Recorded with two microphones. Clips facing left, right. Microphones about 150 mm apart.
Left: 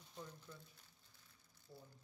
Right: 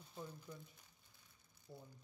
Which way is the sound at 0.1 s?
10° right (ahead or behind).